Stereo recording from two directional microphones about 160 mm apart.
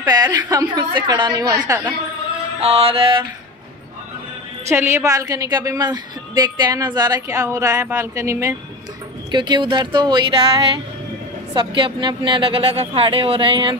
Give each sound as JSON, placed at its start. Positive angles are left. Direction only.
{"t": 0.0, "sound": "a woman's voice", "side_deg": -25}
{"t": 2.6, "sound": "speech", "side_deg": -35}
{"t": 4.6, "sound": "a woman's voice", "side_deg": -15}
{"t": 9.3, "sound": "a woman's voice", "side_deg": -30}